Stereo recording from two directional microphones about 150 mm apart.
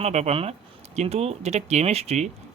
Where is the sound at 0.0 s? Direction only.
45° right (ahead or behind).